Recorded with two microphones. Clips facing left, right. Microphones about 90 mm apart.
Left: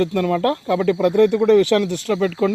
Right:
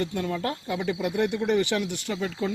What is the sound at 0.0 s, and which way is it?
Speech, 90° left.